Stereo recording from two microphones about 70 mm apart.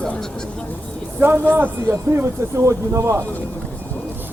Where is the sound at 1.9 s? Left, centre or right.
Right.